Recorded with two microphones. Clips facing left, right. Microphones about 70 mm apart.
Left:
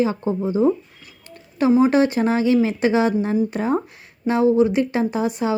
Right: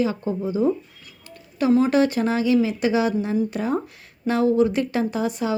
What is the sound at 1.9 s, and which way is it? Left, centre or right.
A woman's voice, left.